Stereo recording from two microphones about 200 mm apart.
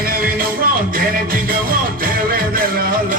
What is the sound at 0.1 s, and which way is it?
Music, 45° right (ahead or behind).